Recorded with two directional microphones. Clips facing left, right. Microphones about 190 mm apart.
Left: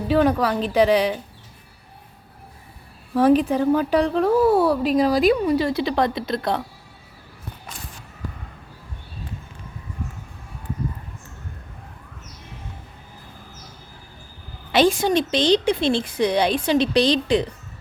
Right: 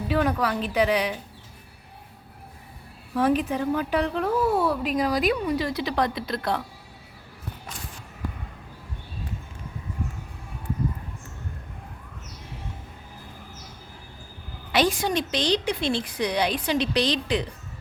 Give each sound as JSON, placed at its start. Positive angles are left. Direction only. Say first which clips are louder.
{"t": 0.1, "sound": "a woman's voice", "louder": "left 6 dB", "side_deg": 30}
{"t": 3.2, "sound": "a woman's voice", "louder": "left 6 dB", "side_deg": 35}
{"t": 14.7, "sound": "a woman's voice", "louder": "left 5 dB", "side_deg": 25}